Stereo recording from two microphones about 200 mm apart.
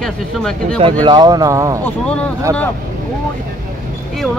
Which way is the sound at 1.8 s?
5° left (ahead or behind).